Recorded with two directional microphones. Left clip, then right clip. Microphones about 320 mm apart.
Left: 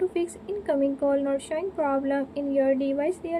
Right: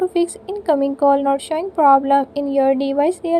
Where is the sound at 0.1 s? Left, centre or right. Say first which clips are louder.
Right 9 dB; right.